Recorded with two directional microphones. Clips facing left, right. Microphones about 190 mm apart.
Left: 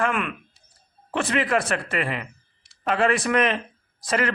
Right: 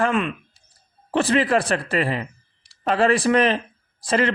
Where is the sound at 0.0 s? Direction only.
25° right (ahead or behind).